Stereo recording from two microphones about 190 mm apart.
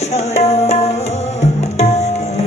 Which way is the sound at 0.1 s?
35° left (ahead or behind).